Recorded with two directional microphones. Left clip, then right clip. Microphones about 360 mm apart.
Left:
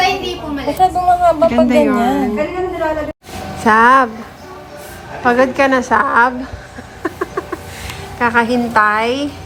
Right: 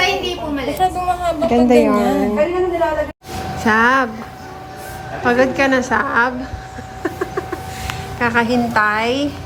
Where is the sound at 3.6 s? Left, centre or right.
Centre.